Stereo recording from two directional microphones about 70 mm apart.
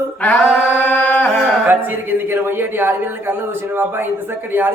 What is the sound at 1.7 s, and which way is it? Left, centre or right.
A man's voice, right.